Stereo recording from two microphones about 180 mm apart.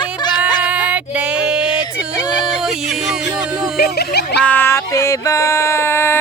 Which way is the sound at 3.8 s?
65° left (ahead or behind).